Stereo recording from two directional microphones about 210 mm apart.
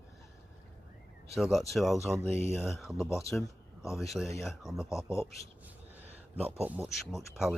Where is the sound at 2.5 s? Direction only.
Centre (ahead or behind).